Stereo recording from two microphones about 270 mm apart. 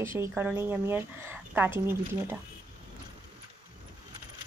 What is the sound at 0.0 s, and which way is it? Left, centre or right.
A woman's voice, centre.